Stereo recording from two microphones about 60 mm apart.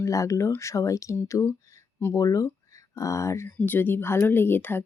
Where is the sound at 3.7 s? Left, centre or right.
Left.